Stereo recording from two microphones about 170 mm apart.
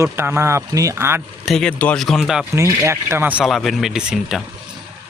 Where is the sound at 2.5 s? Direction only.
15° right (ahead or behind).